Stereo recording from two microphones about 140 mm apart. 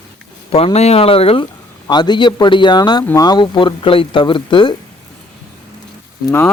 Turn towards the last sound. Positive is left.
turn(degrees=15)  # may be behind; listen again after turning